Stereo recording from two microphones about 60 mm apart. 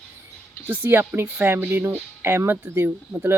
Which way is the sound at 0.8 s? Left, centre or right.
Right.